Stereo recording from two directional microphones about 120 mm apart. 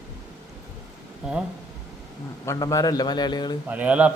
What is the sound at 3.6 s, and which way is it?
Speech, 15° right (ahead or behind).